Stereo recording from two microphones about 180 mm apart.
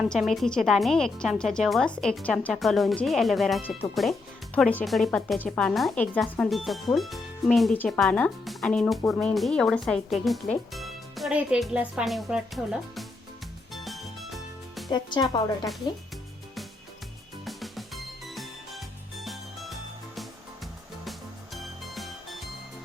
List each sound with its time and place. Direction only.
0.0 s speech: centre (ahead or behind)
13.7 s music: centre (ahead or behind)
14.8 s speech: 25° left (ahead or behind)
17.4 s music: centre (ahead or behind)